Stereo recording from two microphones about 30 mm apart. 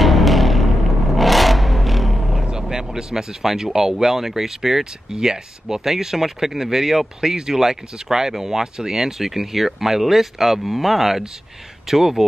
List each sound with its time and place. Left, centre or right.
0.0 s vehicle: centre
2.7 s speech: right